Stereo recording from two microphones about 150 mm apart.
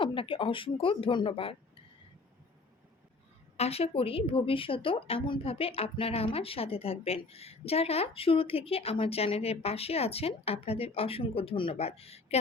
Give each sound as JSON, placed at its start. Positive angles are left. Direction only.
{"t": 0.0, "sound": "speech", "side_deg": 35}
{"t": 3.6, "sound": "speech", "side_deg": 40}